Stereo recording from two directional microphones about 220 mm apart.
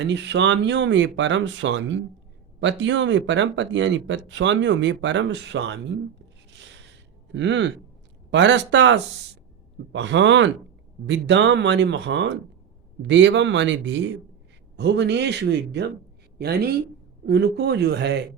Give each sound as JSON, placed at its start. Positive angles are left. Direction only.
{"t": 0.0, "sound": "speech", "side_deg": -55}
{"t": 7.3, "sound": "a man's voice", "side_deg": -55}